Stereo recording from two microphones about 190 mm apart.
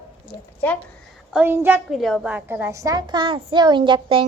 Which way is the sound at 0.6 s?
10° left (ahead or behind).